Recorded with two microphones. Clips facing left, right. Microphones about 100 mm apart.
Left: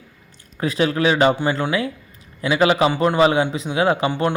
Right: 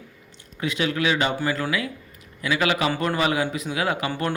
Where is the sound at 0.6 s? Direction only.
35° left (ahead or behind).